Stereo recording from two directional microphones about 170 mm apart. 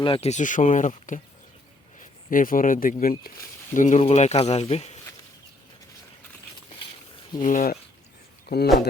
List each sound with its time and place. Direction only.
0.0 s speech: 35° left (ahead or behind)
7.3 s speech: 50° left (ahead or behind)
8.4 s speech: 70° left (ahead or behind)